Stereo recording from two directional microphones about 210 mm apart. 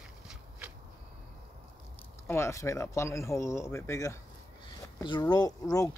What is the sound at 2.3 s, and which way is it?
Speech, 15° left (ahead or behind).